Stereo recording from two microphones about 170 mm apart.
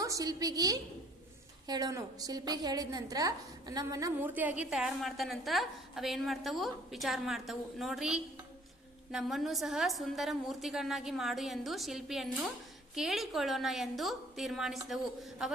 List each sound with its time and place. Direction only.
0.0 s a woman's voice: 20° right (ahead or behind); by 15.5 s centre (ahead or behind)